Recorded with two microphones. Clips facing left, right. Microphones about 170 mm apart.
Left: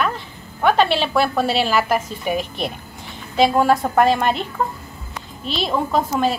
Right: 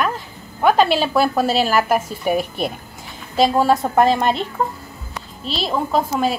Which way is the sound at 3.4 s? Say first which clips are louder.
Even; 5° right (ahead or behind).